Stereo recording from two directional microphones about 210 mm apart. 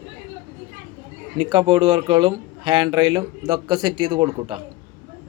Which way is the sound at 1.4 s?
20° right (ahead or behind).